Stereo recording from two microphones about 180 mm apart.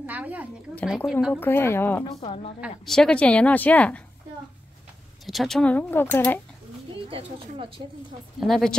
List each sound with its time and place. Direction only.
0.0 s a woman's voice: 10° right (ahead or behind)
1.3 s a woman's voice: 10° left (ahead or behind)
2.1 s a woman's voice: 30° left (ahead or behind)
2.8 s a woman's voice: 5° left (ahead or behind)
5.2 s a woman's voice: centre (ahead or behind)
7.1 s a woman's voice: 30° right (ahead or behind)
8.4 s speech: centre (ahead or behind)